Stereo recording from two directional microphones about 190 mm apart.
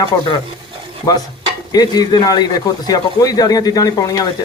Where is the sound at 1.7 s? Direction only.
20° left (ahead or behind).